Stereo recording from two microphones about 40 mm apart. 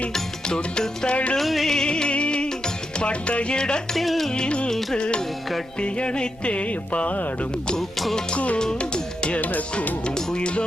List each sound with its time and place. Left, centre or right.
0.1 s music: centre
1.1 s music: left
1.4 s music: centre
1.7 s music: left
3.0 s speech: left
3.9 s music: centre
4.3 s music: left
7.8 s music: centre
8.5 s music: left
9.4 s music: left
10.2 s music: left